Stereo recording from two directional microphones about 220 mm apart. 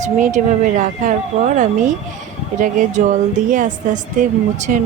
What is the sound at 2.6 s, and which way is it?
A woman's voice, 35° right (ahead or behind).